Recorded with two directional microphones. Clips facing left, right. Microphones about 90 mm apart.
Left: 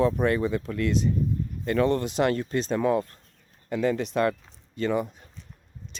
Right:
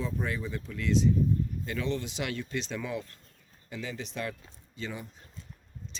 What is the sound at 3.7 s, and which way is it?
Speech, 60° left (ahead or behind).